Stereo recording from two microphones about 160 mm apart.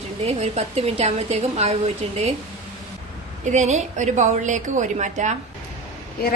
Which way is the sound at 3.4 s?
45° right (ahead or behind).